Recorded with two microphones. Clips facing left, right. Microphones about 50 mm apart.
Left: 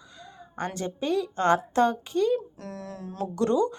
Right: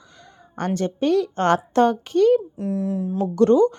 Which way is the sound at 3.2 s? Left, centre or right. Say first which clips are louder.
Right 8 dB; right.